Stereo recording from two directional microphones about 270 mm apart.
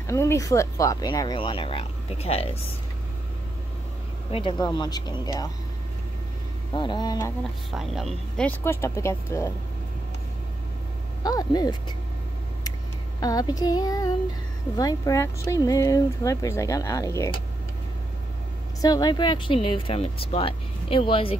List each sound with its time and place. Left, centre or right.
0.0 s speech: centre
4.3 s speech: centre
6.7 s speech: centre
7.7 s speech: centre
11.2 s speech: centre
13.2 s speech: centre
18.8 s speech: centre